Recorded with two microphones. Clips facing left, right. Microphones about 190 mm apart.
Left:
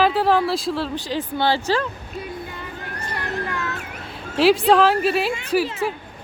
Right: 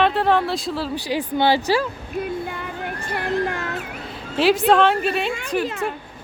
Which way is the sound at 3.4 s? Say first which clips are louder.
Right 2 dB; 55° right (ahead or behind).